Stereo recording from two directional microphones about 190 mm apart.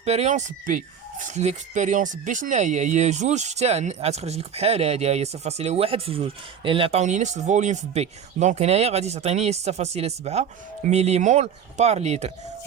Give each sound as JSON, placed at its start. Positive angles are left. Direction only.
{"t": 0.0, "sound": "speech", "side_deg": -35}